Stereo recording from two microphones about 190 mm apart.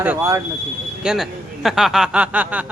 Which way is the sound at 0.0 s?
10° right (ahead or behind).